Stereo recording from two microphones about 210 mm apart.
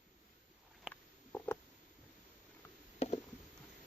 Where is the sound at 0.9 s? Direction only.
10° left (ahead or behind).